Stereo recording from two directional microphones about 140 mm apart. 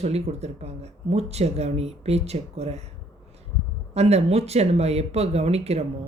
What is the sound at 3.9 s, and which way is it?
Speech, 50° right (ahead or behind).